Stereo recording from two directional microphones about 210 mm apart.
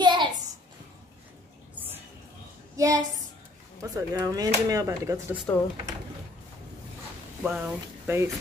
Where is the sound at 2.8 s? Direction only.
15° right (ahead or behind).